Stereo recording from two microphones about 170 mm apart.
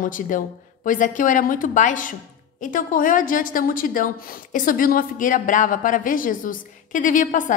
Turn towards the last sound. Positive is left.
turn(degrees=50)  # may be behind; listen again after turning